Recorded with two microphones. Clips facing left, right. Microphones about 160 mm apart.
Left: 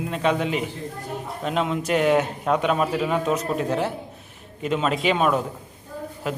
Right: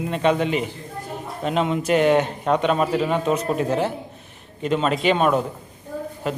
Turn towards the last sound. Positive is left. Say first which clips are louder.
# right 3 dB
turn(degrees=5)  # may be behind; listen again after turning